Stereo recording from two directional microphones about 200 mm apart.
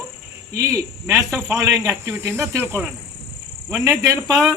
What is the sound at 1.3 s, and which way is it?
Speech, centre (ahead or behind).